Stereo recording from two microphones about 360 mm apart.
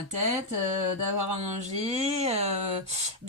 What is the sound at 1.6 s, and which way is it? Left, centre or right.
Speech, centre.